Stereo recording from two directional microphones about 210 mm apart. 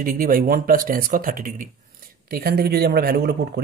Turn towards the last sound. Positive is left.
turn(degrees=-50)  # may be behind; listen again after turning